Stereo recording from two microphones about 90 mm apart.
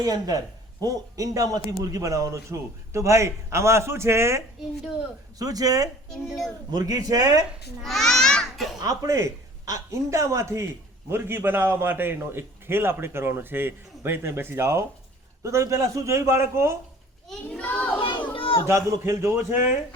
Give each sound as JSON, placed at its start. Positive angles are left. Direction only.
{"t": 0.0, "sound": "a man's voice", "side_deg": -45}
{"t": 5.4, "sound": "speech", "side_deg": -45}
{"t": 6.1, "sound": "a child's voice", "side_deg": 5}
{"t": 6.7, "sound": "speech", "side_deg": -45}
{"t": 7.9, "sound": "a child's voice", "side_deg": 5}
{"t": 8.8, "sound": "a man's voice", "side_deg": -35}
{"t": 17.5, "sound": "a child's voice", "side_deg": 15}
{"t": 18.0, "sound": "a sound", "side_deg": 70}
{"t": 18.7, "sound": "a man's voice", "side_deg": -35}